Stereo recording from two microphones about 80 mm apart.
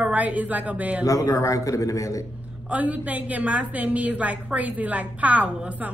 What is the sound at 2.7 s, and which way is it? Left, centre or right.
A woman's voice, centre.